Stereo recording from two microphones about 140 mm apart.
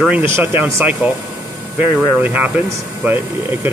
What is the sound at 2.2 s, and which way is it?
Speech, 10° right (ahead or behind).